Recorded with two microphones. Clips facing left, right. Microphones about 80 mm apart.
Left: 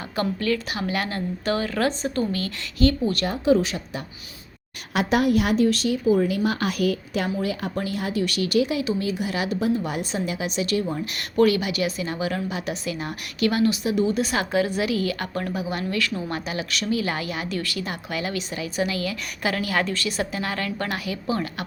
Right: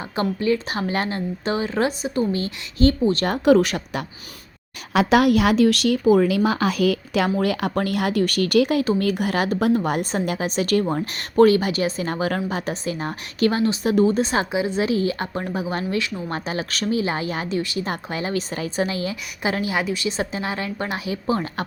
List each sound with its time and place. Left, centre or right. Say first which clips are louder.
0.2 s a woman's voice: right 3 dB; right
2.0 s speech: right 2 dB; centre
2.3 s a woman's voice: right 3 dB; right
3.2 s speech: right 4 dB; right
5.1 s speech: right 3 dB; right
7.3 s speech: right 5 dB; right
8.2 s a woman's voice: right 3 dB; right
13.8 s a woman's voice: right 4 dB; right
16.3 s a woman's voice: right 2 dB; right
17.6 s a woman's voice: right 4 dB; right